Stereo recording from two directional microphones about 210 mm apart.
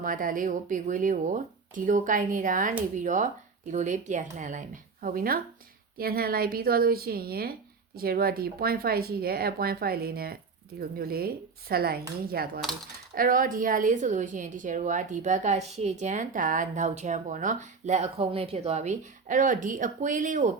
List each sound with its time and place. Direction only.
0.0 s a woman's voice: 40° right (ahead or behind)